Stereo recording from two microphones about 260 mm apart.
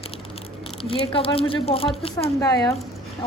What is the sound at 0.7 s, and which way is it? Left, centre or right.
Speech, left.